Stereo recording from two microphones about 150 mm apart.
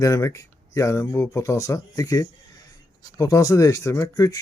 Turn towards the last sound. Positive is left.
turn(degrees=25)  # may be behind; listen again after turning